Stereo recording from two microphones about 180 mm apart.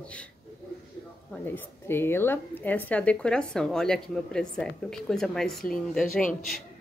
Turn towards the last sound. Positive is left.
turn(degrees=5)  # may be behind; listen again after turning